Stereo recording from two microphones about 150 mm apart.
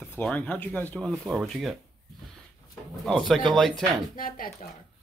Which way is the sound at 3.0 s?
Centre (ahead or behind).